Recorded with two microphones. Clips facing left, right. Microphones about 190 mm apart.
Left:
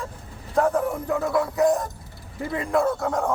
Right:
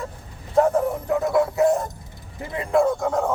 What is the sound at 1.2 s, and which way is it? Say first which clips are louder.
Speech: right 2 dB; 20° right (ahead or behind).